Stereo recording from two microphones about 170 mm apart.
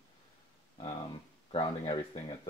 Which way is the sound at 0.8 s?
35° left (ahead or behind).